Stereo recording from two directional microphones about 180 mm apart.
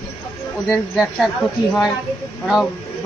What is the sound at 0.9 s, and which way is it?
A man's voice, centre (ahead or behind).